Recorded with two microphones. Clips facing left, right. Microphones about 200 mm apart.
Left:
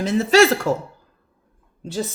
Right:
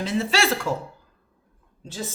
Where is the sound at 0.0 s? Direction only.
45° left (ahead or behind).